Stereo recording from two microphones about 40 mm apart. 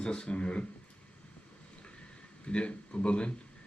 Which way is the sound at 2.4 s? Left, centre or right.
Left.